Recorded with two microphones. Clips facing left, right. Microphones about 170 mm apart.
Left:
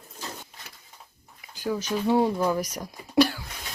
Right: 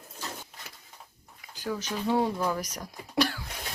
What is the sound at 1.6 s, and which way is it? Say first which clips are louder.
Speech: left 5 dB; 15° left (ahead or behind).